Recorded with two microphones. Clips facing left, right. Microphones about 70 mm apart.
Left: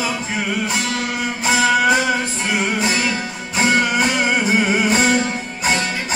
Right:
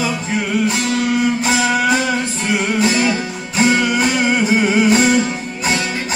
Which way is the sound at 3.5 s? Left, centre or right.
Left.